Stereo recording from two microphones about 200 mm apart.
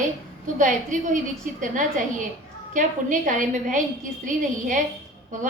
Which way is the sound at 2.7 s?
40° right (ahead or behind).